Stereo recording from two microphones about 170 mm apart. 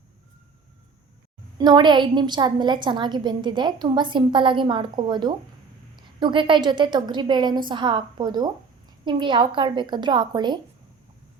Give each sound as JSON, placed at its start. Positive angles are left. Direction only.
{"t": 1.5, "sound": "a woman's voice", "side_deg": -25}